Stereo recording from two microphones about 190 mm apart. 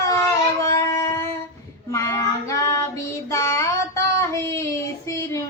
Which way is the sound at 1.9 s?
15° left (ahead or behind).